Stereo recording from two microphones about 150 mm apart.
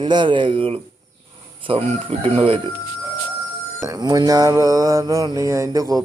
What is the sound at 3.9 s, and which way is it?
Mantra, 25° right (ahead or behind).